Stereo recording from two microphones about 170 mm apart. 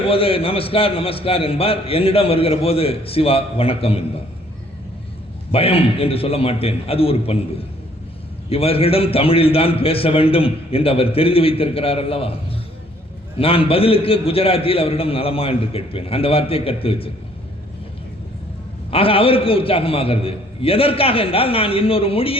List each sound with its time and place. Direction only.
0.1 s a man's voice: 35° left (ahead or behind)
5.5 s a man's voice: 35° left (ahead or behind)
8.4 s a man's voice: 35° left (ahead or behind)
13.4 s a man's voice: 35° left (ahead or behind)
18.9 s a man's voice: 35° left (ahead or behind)